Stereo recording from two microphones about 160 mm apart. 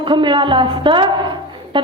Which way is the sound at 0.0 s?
30° right (ahead or behind).